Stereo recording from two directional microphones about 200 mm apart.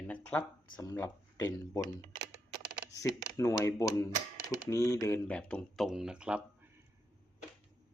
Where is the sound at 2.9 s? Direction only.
15° left (ahead or behind); by 6.4 s 5° right (ahead or behind).